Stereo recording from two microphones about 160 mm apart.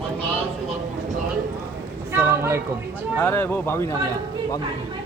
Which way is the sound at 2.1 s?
15° right (ahead or behind).